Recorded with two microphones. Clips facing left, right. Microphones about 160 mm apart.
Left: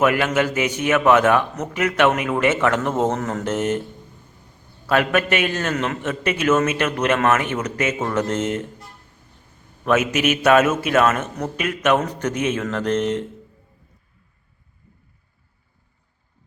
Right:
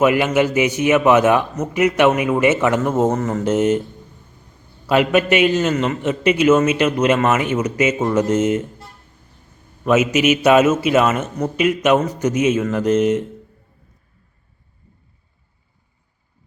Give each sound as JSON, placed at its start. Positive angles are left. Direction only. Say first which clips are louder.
{"t": 0.0, "sound": "a man's voice", "louder": "right 3 dB", "side_deg": -10}
{"t": 4.9, "sound": "a man's voice", "louder": "right 4 dB", "side_deg": -10}
{"t": 5.7, "sound": "a man's voice", "louder": "right 4 dB", "side_deg": 0}
{"t": 10.0, "sound": "a man's voice", "louder": "right 5 dB", "side_deg": 55}
{"t": 10.2, "sound": "a man's voice", "louder": "right 2 dB", "side_deg": -10}